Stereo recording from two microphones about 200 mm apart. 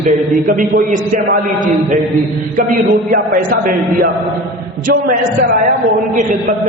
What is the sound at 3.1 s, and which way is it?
A man's voice, 45° right (ahead or behind).